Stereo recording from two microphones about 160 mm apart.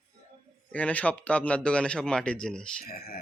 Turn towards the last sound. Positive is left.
turn(degrees=70)  # may be behind; listen again after turning